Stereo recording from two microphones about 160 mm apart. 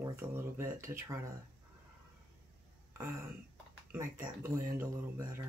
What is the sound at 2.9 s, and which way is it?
Speech, 15° right (ahead or behind).